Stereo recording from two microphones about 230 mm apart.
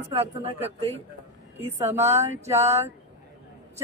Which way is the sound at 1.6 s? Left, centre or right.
Centre.